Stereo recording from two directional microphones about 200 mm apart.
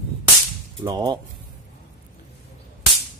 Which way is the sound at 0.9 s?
20° right (ahead or behind).